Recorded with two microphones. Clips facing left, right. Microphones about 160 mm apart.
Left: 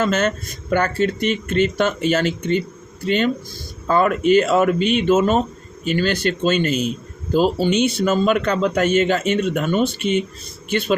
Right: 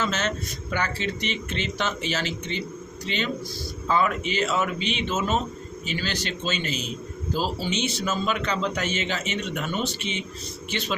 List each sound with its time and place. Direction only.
0.0 s a man's voice: 50° left (ahead or behind)